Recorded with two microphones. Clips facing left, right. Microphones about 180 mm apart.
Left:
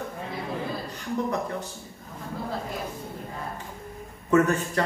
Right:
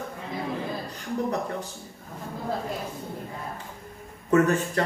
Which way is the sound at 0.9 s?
35° right (ahead or behind).